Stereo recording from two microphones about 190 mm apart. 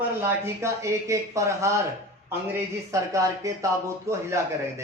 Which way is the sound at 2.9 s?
15° right (ahead or behind).